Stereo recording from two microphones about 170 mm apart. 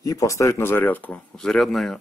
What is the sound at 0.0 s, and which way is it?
Speech, 20° left (ahead or behind).